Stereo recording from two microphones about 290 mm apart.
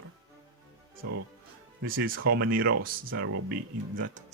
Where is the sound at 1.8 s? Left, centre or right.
Right.